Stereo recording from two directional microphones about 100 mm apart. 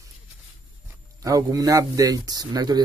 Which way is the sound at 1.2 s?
35° right (ahead or behind).